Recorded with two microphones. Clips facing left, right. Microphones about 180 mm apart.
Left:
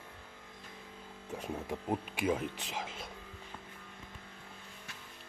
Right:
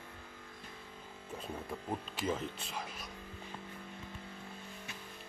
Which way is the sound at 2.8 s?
25° left (ahead or behind).